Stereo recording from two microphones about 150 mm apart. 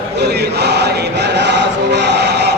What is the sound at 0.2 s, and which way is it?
Chant, 90° right.